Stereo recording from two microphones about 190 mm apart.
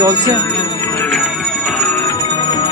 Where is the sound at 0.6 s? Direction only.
20° left (ahead or behind).